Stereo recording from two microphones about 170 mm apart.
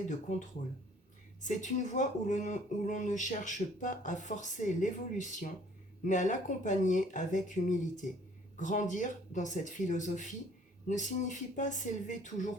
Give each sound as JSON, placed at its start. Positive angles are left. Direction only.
{"t": 0.1, "sound": "speech", "side_deg": 45}